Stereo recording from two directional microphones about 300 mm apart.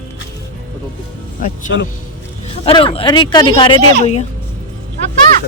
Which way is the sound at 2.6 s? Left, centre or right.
Centre.